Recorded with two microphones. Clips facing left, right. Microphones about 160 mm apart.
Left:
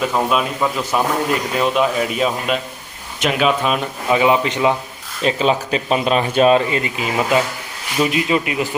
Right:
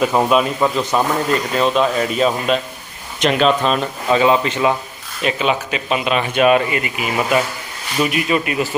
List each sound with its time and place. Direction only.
0.3 s a man's voice: centre (ahead or behind); by 4.7 s 20° left (ahead or behind)
5.2 s speech: 35° left (ahead or behind)